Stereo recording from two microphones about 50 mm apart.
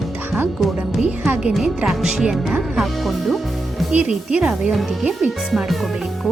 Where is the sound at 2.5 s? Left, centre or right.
Centre.